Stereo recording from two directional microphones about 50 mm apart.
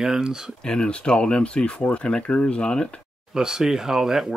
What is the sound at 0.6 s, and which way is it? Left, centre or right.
Speech, centre.